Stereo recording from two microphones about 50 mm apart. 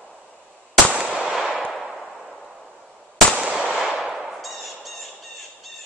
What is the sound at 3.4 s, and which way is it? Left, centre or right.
Gunshot, centre.